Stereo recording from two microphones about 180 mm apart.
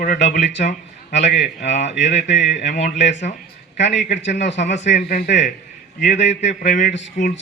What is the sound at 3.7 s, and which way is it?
Speech, 80° left.